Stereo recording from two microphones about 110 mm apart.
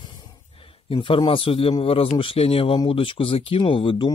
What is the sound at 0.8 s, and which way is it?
Speech, 55° left (ahead or behind).